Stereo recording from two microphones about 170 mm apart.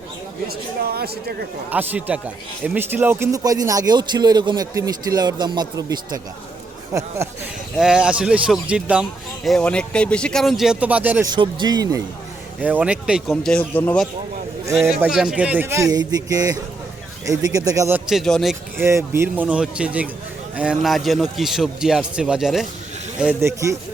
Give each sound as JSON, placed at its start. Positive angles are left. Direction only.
{"t": 0.4, "sound": "speech", "side_deg": -65}
{"t": 1.7, "sound": "a man's voice", "side_deg": -10}
{"t": 7.8, "sound": "speech", "side_deg": -5}
{"t": 11.3, "sound": "a man's voice", "side_deg": -25}
{"t": 12.5, "sound": "speech", "side_deg": -10}
{"t": 14.8, "sound": "a man's voice", "side_deg": 0}
{"t": 18.1, "sound": "speech", "side_deg": 0}
{"t": 18.8, "sound": "a man's voice", "side_deg": -15}
{"t": 23.2, "sound": "a man's voice", "side_deg": -15}